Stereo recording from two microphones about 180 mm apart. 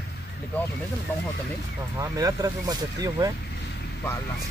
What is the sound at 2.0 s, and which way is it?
Speech, 20° right (ahead or behind).